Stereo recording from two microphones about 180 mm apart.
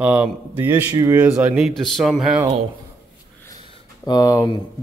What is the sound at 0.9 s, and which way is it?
Speech, 20° right (ahead or behind).